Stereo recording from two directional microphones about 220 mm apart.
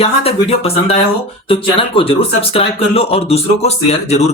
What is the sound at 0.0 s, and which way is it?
Speech, 25° left (ahead or behind).